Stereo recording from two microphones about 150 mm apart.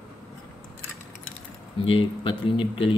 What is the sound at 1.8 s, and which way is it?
Speech, 35° left (ahead or behind).